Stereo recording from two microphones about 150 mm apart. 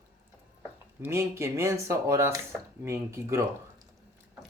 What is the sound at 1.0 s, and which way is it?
Speech, 20° right (ahead or behind).